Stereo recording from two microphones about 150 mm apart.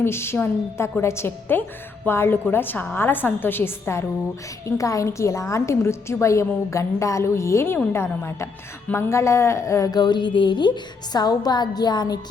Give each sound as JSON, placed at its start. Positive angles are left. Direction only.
{"t": 0.0, "sound": "a woman's voice", "side_deg": 15}